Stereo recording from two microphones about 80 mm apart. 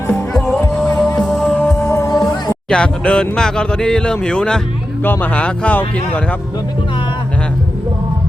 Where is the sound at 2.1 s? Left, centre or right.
Left.